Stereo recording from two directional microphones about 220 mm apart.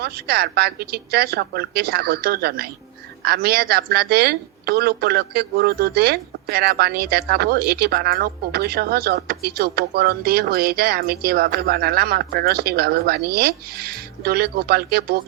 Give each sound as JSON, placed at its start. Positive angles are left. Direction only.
{"t": 0.0, "sound": "a woman's voice", "side_deg": -45}